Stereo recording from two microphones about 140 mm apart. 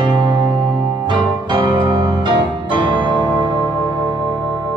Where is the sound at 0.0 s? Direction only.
35° right (ahead or behind).